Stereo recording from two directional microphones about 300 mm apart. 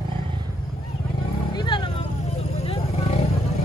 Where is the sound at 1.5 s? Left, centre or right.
Centre.